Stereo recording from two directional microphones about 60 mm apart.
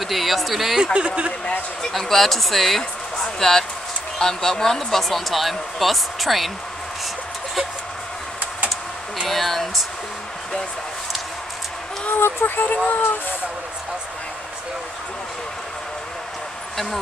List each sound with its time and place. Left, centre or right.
0.0 s speech: centre
0.9 s speech: centre
1.8 s speech: centre
9.2 s speech: centre
12.1 s speech: left